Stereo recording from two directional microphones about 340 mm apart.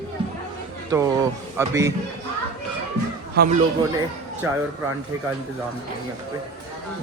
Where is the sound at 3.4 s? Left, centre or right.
Right.